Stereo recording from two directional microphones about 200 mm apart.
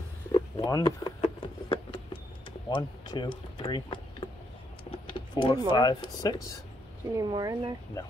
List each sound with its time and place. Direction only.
0.3 s a sound: 20° left (ahead or behind)
2.7 s speech: 25° left (ahead or behind)
5.1 s vehicle: 25° left (ahead or behind)
5.8 s speech: 20° left (ahead or behind)
7.2 s speech: 20° right (ahead or behind)
8.0 s speech: 15° left (ahead or behind)